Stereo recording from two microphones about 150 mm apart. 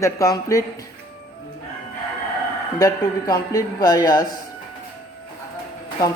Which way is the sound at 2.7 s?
25° left (ahead or behind).